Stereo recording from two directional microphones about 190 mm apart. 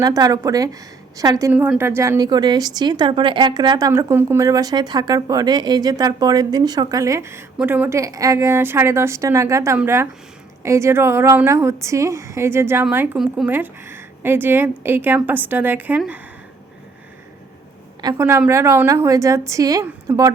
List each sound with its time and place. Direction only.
0.0 s a woman's voice: 20° right (ahead or behind)
18.0 s a woman's voice: 20° right (ahead or behind)